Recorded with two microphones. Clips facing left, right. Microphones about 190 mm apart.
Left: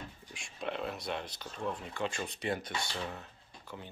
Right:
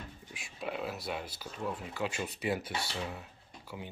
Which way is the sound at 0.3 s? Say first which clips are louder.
Even; 5° right (ahead or behind).